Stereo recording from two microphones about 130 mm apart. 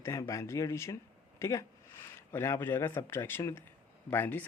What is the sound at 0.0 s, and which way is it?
Speech, 25° left (ahead or behind).